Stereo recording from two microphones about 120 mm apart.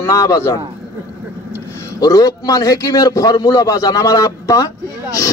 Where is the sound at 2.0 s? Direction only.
30° left (ahead or behind).